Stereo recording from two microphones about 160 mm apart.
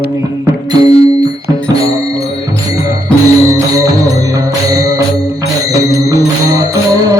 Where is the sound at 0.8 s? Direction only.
40° left (ahead or behind).